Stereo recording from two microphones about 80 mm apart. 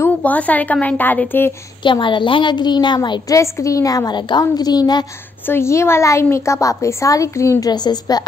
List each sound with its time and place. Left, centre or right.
0.2 s a woman's voice: centre
1.8 s a woman's voice: left
3.3 s a woman's voice: left
5.5 s a woman's voice: left
7.7 s a woman's voice: left